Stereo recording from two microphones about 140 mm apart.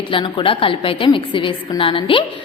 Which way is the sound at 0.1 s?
40° left (ahead or behind).